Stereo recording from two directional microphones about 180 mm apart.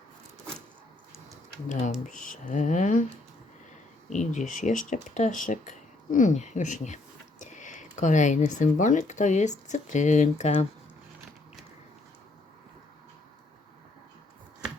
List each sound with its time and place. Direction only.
1.6 s speech: 45° left (ahead or behind)
4.1 s speech: 45° left (ahead or behind)